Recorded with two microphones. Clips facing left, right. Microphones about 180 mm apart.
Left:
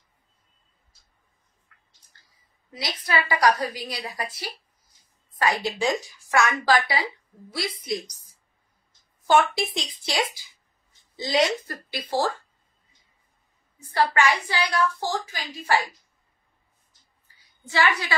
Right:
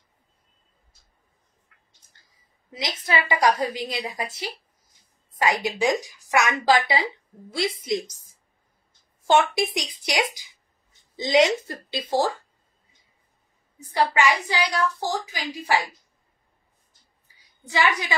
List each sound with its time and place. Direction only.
3.1 s a woman's voice: 25° right (ahead or behind)
9.3 s a woman's voice: 25° right (ahead or behind)
13.9 s a woman's voice: 15° right (ahead or behind)
17.6 s a woman's voice: 15° right (ahead or behind)